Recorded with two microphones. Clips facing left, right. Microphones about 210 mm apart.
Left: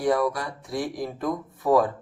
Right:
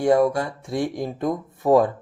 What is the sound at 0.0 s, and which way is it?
Speech, 25° right (ahead or behind).